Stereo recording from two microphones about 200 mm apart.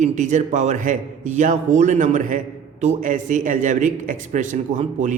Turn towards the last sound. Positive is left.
turn(degrees=-40)  # may be behind; listen again after turning